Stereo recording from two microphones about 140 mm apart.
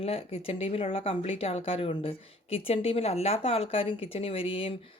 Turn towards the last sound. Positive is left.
turn(degrees=40)  # may be behind; listen again after turning